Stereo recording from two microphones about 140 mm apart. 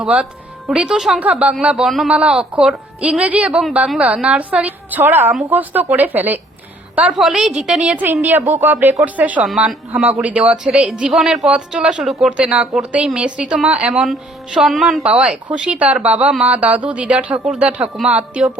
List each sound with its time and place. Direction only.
0.0 s a woman's voice: 10° right (ahead or behind)